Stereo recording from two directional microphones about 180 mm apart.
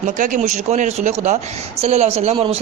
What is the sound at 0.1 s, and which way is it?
Speech, 45° right (ahead or behind).